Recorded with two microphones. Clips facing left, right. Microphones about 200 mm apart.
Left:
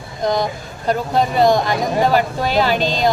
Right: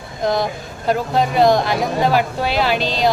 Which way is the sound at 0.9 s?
Centre (ahead or behind).